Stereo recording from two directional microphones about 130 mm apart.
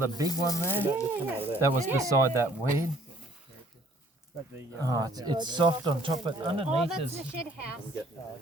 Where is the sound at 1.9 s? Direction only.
25° right (ahead or behind).